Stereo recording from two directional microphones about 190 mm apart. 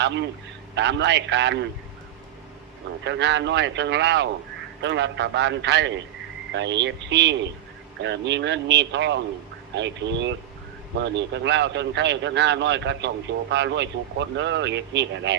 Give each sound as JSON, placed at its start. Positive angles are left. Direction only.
{"t": 0.0, "sound": "a man's voice", "side_deg": -70}
{"t": 3.0, "sound": "a man's voice", "side_deg": -70}